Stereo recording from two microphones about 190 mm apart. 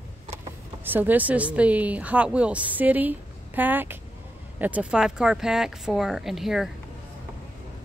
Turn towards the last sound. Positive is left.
turn(degrees=0)  # may be behind; listen again after turning